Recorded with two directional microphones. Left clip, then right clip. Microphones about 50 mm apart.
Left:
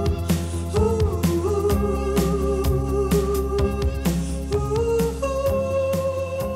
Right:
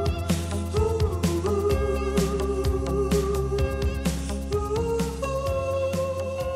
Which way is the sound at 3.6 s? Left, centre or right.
Right.